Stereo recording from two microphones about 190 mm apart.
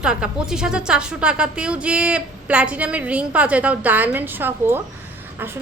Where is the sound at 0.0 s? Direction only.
5° right (ahead or behind).